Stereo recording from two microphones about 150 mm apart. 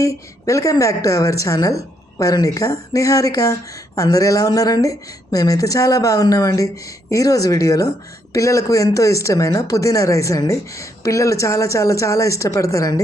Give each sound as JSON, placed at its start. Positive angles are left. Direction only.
{"t": 0.0, "sound": "a woman's voice", "side_deg": 20}